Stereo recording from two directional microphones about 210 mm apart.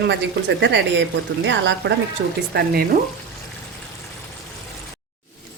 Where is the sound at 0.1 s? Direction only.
55° right (ahead or behind).